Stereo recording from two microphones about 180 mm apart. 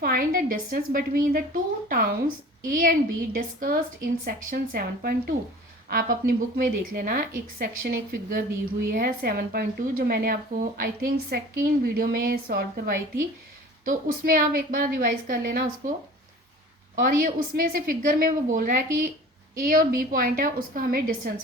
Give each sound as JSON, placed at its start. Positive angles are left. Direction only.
{"t": 0.0, "sound": "a woman's voice", "side_deg": -50}
{"t": 16.9, "sound": "a woman's voice", "side_deg": -50}